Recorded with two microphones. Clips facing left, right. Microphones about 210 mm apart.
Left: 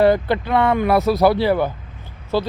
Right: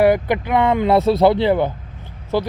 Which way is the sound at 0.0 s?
15° right (ahead or behind).